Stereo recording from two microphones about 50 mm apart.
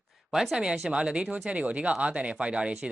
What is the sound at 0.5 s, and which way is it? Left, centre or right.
Speech, centre.